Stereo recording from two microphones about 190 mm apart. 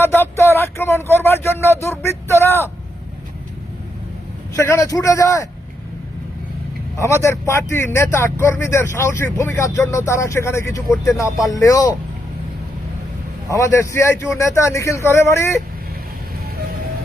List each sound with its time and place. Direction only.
0.0 s a sound: 10° left (ahead or behind)
4.5 s a man's voice: 15° left (ahead or behind)
6.9 s a man's voice: 15° left (ahead or behind)
13.5 s a man's voice: 15° left (ahead or behind)